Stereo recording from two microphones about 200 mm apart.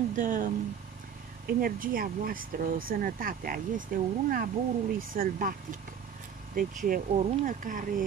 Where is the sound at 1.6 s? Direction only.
45° right (ahead or behind).